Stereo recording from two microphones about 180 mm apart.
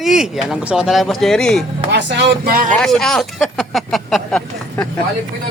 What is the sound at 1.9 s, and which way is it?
Speech, 70° right (ahead or behind).